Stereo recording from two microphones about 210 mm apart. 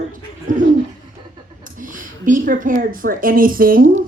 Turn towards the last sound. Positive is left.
turn(degrees=-45)  # may be behind; listen again after turning